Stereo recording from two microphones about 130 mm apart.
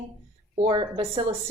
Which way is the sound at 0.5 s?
40° right (ahead or behind).